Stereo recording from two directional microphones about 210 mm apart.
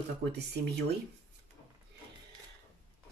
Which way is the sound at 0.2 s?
50° right (ahead or behind).